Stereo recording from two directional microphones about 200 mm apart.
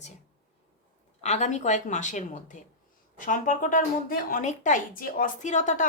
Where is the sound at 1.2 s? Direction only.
35° left (ahead or behind).